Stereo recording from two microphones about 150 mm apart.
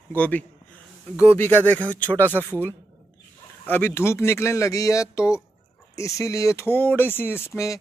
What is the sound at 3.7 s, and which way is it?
Speech, 15° left (ahead or behind).